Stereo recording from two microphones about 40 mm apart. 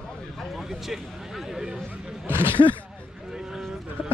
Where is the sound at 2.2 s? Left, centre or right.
Right.